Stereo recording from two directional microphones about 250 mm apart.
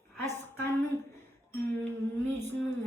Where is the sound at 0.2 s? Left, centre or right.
Centre.